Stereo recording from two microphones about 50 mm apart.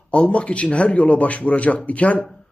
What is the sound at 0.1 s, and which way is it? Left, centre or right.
A man's voice, left.